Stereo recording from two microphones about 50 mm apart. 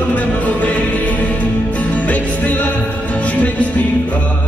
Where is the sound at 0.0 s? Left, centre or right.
Left.